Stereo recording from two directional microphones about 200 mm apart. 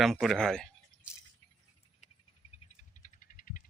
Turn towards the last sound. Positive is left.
turn(degrees=45)  # may be behind; listen again after turning